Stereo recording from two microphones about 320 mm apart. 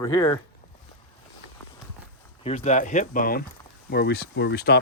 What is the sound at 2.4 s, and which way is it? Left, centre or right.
Speech, left.